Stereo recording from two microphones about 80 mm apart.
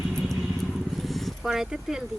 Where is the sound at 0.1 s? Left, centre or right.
Centre.